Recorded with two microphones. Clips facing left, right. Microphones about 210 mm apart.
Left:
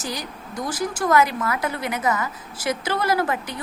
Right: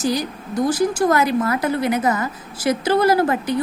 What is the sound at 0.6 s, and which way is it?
A woman's voice, 35° right (ahead or behind).